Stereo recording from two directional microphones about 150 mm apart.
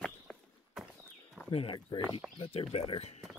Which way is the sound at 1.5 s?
35° left (ahead or behind).